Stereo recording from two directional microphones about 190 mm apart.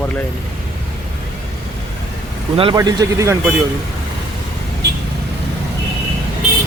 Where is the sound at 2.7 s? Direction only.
20° right (ahead or behind).